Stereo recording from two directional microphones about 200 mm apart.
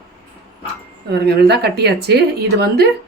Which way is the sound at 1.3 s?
55° right (ahead or behind).